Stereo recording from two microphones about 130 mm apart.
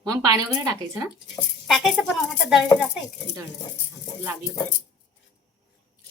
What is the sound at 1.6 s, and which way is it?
Speech, centre (ahead or behind).